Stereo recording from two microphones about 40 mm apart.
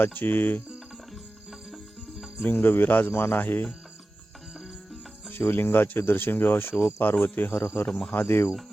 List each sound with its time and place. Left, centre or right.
0.0 s cricket: left
1.5 s cricket: centre
2.4 s speech: left
3.1 s speech: left
3.4 s cricket: left
5.4 s speech: left
8.1 s speech: left